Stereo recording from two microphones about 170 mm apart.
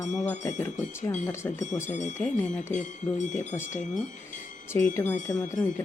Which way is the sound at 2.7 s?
45° left (ahead or behind).